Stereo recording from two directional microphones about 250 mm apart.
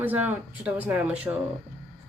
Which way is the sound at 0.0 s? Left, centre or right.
Centre.